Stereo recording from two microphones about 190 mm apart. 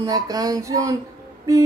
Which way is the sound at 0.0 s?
20° right (ahead or behind).